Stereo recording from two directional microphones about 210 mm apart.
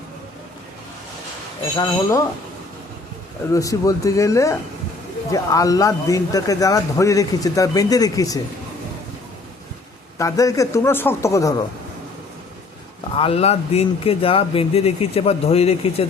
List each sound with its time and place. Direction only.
1.7 s a man's voice: 15° left (ahead or behind)
3.5 s a man's voice: 15° left (ahead or behind)
10.2 s a man's voice: 15° left (ahead or behind)
13.1 s speech: 25° left (ahead or behind)